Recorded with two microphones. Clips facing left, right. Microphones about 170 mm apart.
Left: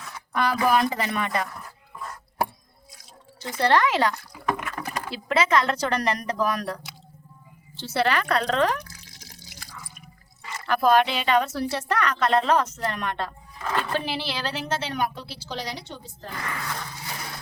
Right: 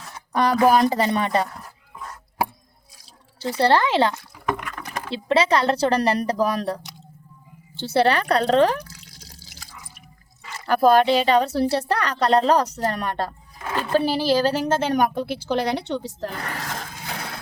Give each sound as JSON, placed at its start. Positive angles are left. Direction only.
{"t": 0.3, "sound": "a woman's voice", "side_deg": -35}
{"t": 3.3, "sound": "a woman's voice", "side_deg": -30}
{"t": 4.4, "sound": "liquid", "side_deg": 5}
{"t": 5.0, "sound": "a woman's voice", "side_deg": -30}
{"t": 10.7, "sound": "a woman's voice", "side_deg": -35}